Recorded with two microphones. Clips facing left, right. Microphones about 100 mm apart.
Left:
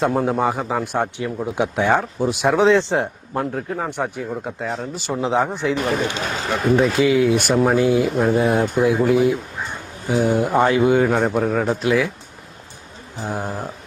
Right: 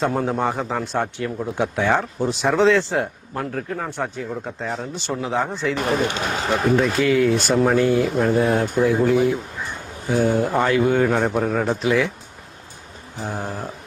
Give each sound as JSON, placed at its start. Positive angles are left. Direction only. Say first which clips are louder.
{"t": 0.0, "sound": "a man's voice", "louder": "left 2 dB", "side_deg": 5}
{"t": 4.2, "sound": "a man's voice", "louder": "left 2 dB", "side_deg": 5}
{"t": 5.2, "sound": "a man's voice", "louder": "left 4 dB", "side_deg": 15}
{"t": 6.0, "sound": "speech", "louder": "right 1 dB", "side_deg": -50}
{"t": 6.7, "sound": "a man's voice", "louder": "left 4 dB", "side_deg": 10}
{"t": 8.0, "sound": "a man's voice", "louder": "left 1 dB", "side_deg": 0}
{"t": 10.2, "sound": "a man's voice", "louder": "left 3 dB", "side_deg": 15}
{"t": 13.2, "sound": "a man's voice", "louder": "left 2 dB", "side_deg": 15}